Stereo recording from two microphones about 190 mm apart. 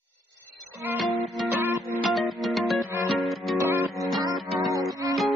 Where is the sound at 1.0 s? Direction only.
Centre (ahead or behind).